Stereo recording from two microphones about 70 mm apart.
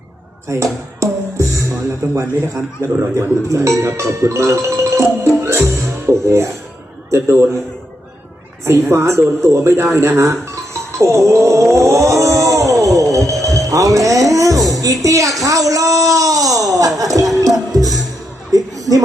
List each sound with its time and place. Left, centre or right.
0.4 s a man's voice: right
8.6 s speech: right
9.4 s music: right
15.4 s a sound: right
17.4 s music: right